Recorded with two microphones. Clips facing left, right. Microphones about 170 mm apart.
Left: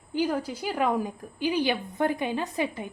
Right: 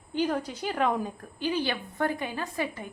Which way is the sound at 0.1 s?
5° left (ahead or behind).